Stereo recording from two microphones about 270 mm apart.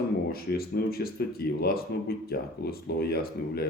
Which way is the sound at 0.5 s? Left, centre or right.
Left.